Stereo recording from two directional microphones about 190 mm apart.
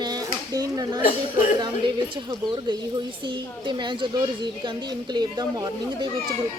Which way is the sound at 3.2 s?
25° right (ahead or behind).